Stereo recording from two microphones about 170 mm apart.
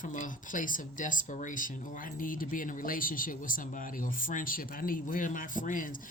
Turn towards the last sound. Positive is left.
turn(degrees=50)  # may be behind; listen again after turning